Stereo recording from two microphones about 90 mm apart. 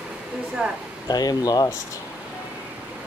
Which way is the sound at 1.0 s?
50° left (ahead or behind).